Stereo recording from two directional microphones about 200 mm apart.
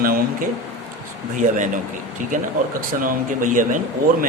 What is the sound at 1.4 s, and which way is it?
Speech, 40° right (ahead or behind).